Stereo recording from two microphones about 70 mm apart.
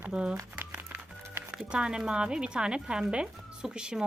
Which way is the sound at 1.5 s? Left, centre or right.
Centre.